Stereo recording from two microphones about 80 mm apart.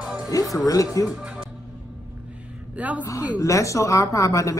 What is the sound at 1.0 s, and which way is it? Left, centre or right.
Speech, centre.